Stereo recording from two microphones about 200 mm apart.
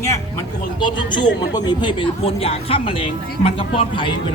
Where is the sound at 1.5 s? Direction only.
20° left (ahead or behind).